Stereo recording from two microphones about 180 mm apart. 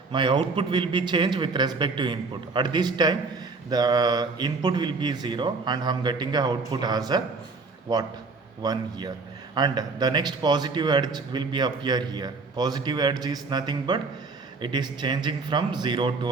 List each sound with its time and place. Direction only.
0.1 s a man's voice: 25° right (ahead or behind)